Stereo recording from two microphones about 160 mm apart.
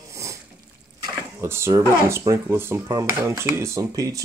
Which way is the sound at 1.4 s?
15° right (ahead or behind).